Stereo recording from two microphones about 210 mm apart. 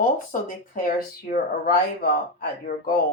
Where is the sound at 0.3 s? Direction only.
40° left (ahead or behind).